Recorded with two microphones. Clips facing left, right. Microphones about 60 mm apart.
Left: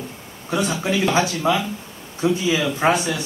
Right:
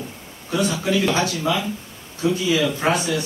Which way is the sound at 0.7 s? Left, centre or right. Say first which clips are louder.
Right 1 dB; left.